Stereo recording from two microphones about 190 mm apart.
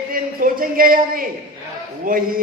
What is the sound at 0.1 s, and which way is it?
A man's voice, 50° right (ahead or behind).